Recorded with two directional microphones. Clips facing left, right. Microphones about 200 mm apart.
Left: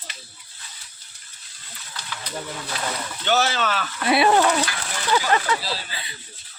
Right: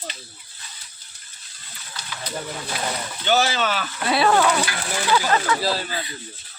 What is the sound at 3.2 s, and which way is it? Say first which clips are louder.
Speech: right 1 dB; centre (ahead or behind).